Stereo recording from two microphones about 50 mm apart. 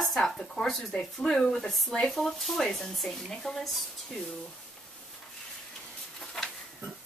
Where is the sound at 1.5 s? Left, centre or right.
Centre.